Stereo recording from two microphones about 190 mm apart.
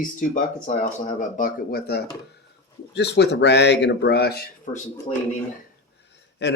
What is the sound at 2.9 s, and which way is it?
Speech, 65° left (ahead or behind).